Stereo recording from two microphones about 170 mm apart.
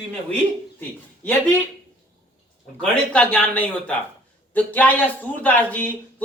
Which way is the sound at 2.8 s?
5° left (ahead or behind).